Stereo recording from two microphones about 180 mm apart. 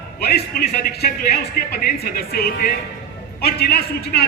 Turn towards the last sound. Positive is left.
turn(degrees=60)  # may be behind; listen again after turning